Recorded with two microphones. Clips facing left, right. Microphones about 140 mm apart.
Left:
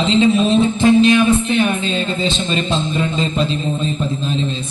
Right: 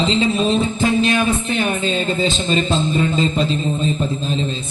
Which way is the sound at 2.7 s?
Centre (ahead or behind).